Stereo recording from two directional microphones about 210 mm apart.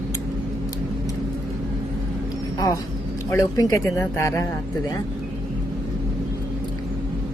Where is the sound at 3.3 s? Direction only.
15° left (ahead or behind).